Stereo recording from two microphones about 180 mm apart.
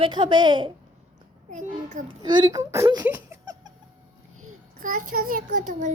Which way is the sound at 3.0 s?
10° right (ahead or behind).